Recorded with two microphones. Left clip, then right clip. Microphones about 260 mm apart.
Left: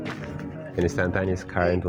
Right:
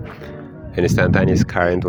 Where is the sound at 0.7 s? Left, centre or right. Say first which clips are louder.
Right 8 dB; right.